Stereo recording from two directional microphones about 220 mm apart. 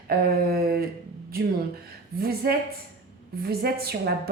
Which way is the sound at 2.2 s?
45° right (ahead or behind).